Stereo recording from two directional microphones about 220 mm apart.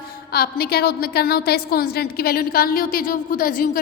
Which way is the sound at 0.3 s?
45° left (ahead or behind).